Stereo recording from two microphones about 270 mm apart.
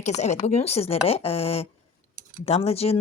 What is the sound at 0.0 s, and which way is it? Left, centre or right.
Speech, left.